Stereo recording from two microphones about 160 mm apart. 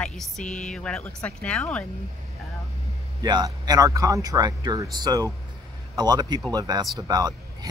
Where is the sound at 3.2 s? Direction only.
25° right (ahead or behind).